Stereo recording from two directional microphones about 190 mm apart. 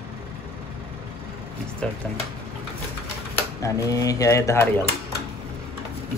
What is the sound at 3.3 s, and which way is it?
Speech, 15° left (ahead or behind).